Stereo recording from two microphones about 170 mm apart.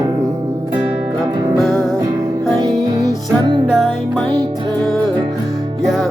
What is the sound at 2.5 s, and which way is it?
Music, 25° right (ahead or behind).